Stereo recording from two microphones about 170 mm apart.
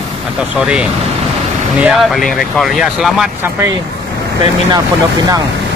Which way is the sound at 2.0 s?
Centre (ahead or behind).